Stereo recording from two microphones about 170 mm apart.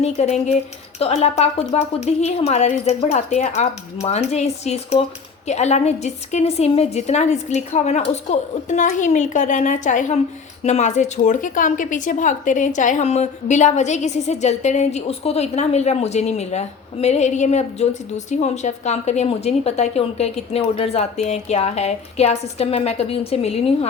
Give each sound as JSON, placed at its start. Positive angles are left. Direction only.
{"t": 0.0, "sound": "a woman's voice", "side_deg": 40}